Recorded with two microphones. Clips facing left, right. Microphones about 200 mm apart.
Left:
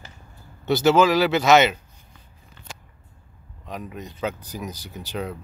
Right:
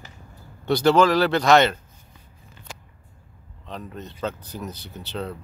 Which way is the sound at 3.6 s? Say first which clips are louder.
Left 1 dB; 10° left (ahead or behind).